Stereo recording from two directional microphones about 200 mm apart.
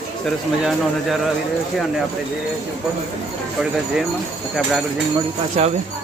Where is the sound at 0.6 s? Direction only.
Centre (ahead or behind).